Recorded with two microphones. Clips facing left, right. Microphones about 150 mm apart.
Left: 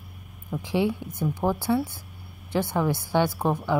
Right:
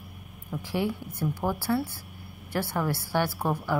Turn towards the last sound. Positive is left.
turn(degrees=15)  # may be behind; listen again after turning